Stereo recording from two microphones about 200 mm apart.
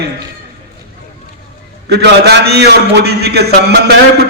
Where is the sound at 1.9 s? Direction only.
55° right (ahead or behind).